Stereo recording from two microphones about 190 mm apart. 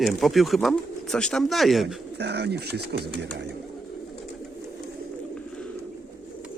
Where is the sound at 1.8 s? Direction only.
60° right (ahead or behind).